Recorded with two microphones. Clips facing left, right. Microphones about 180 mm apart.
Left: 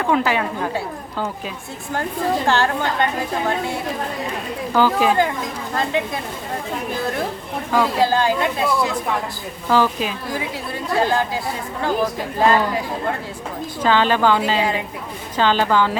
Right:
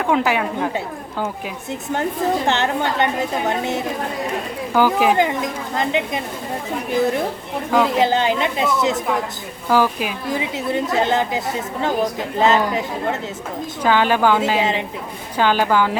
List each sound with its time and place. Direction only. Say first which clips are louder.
0.0 s a woman's voice: right 1 dB; 15° right (ahead or behind)
2.5 s a woman's voice: even; 20° right (ahead or behind)
7.7 s a woman's voice: right 1 dB; 20° right (ahead or behind)
15.4 s a woman's voice: even; 10° right (ahead or behind)